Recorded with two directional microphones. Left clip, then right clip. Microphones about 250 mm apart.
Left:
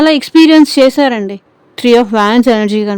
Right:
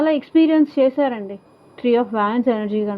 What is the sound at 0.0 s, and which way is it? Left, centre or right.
Speech, left.